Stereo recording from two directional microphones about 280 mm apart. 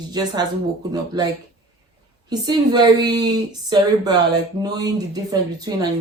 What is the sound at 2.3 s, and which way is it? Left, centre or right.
Speech, centre.